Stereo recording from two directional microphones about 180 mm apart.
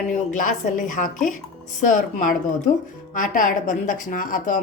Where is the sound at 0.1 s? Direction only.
45° left (ahead or behind).